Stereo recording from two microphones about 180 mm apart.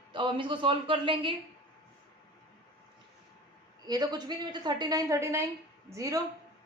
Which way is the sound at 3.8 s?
20° right (ahead or behind).